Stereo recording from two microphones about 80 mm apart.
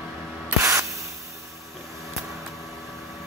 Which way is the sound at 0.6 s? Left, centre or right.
Right.